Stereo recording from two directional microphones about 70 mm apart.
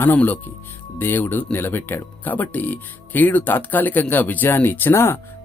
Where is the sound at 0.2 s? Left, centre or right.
Left.